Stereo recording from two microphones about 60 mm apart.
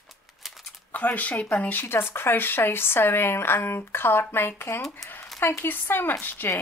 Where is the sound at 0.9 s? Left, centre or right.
Left.